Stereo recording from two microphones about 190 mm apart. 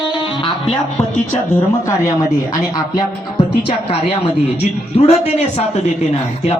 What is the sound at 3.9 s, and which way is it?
A man's voice, 35° left (ahead or behind).